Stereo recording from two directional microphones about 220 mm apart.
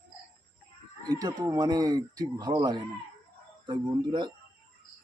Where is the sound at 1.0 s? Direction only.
20° right (ahead or behind).